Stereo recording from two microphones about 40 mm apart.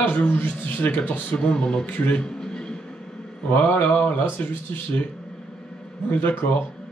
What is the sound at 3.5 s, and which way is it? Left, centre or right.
Speech, left.